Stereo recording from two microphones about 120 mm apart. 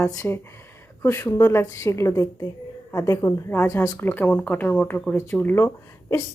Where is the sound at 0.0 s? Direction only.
25° left (ahead or behind).